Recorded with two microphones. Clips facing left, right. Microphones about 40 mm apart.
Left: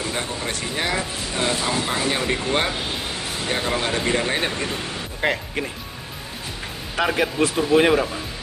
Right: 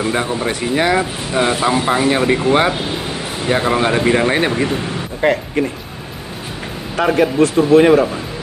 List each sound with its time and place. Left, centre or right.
0.0 s speech: right
5.2 s speech: centre
7.0 s speech: centre